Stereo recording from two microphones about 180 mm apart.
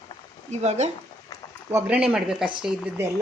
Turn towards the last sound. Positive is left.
turn(degrees=-15)  # may be behind; listen again after turning